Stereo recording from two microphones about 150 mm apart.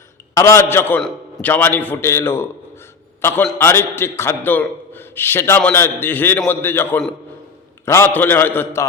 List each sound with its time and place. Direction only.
0.3 s a man's voice: 20° left (ahead or behind)